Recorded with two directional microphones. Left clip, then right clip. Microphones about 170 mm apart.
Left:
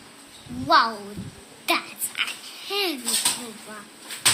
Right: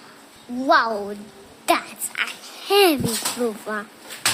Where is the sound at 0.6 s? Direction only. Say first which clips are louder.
Right 1 dB; 60° right (ahead or behind).